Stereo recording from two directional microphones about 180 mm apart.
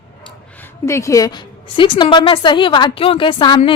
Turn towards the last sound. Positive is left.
turn(degrees=30)  # may be behind; listen again after turning